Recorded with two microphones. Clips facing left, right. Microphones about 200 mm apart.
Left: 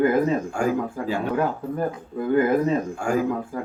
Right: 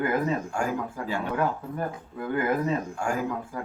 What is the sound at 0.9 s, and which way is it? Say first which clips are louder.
Speech: left 5 dB; 35° left (ahead or behind).